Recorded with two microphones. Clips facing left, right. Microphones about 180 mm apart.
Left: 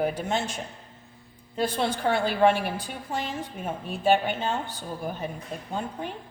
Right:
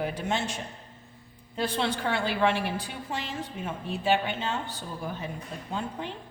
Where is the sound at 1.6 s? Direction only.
45° left (ahead or behind).